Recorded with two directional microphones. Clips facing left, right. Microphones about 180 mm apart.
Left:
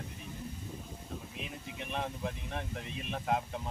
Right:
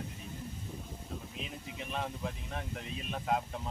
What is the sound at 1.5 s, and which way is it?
Speech, centre (ahead or behind).